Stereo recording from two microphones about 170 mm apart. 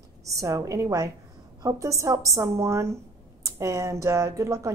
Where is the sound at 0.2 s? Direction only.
20° right (ahead or behind).